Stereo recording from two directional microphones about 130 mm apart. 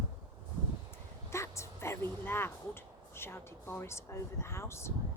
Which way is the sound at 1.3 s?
20° left (ahead or behind).